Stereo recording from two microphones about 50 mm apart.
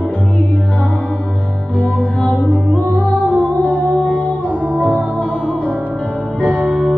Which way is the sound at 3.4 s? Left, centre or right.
Left.